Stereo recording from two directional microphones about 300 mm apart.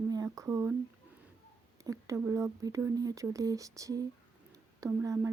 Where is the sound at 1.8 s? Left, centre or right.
Centre.